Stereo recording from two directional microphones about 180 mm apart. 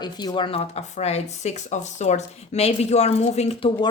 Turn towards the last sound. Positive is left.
turn(degrees=35)  # may be behind; listen again after turning